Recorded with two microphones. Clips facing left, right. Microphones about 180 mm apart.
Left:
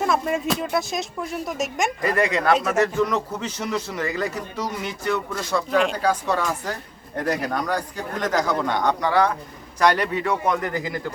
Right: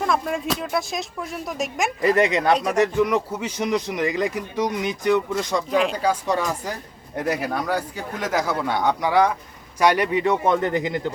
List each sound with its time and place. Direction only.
0.0 s speech: 5° left (ahead or behind)
2.0 s speech: 20° right (ahead or behind)
5.7 s speech: 5° right (ahead or behind); by 11.1 s 25° right (ahead or behind)